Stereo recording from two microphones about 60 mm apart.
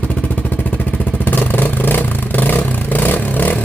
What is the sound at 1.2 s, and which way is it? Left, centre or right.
Vehicle, left.